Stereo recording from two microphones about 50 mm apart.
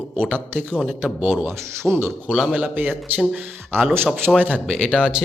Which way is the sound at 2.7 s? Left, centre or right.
Right.